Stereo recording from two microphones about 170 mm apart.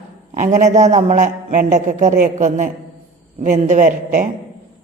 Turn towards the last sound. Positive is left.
turn(degrees=-45)  # may be behind; listen again after turning